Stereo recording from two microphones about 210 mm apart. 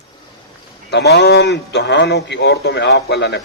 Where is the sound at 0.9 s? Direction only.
55° left (ahead or behind).